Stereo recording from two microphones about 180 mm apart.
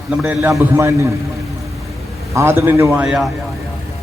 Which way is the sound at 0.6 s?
15° right (ahead or behind).